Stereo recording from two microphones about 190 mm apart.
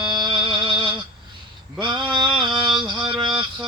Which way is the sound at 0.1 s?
25° right (ahead or behind).